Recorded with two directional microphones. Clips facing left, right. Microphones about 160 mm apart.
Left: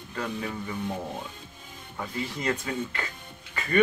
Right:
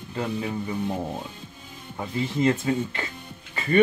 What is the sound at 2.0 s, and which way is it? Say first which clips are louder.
Speech: right 8 dB; 25° right (ahead or behind).